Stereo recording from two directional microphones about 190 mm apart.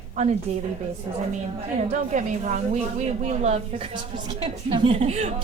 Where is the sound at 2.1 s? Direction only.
40° right (ahead or behind).